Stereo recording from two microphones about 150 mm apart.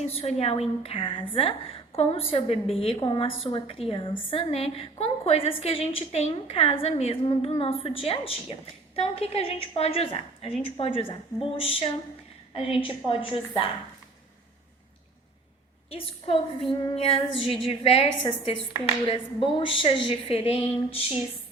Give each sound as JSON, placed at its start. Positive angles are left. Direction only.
{"t": 0.0, "sound": "a woman's voice", "side_deg": 45}
{"t": 15.9, "sound": "a woman's voice", "side_deg": 40}